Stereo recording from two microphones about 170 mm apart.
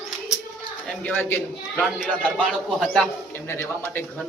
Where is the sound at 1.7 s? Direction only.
5° right (ahead or behind).